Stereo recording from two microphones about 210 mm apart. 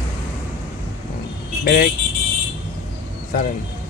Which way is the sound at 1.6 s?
50° left (ahead or behind).